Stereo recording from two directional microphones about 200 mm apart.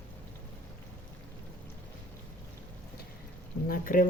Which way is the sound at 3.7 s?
40° left (ahead or behind).